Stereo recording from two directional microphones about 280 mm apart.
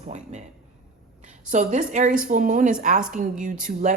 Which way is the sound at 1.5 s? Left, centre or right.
Right.